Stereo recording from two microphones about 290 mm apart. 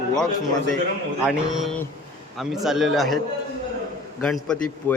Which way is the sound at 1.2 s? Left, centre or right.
Centre.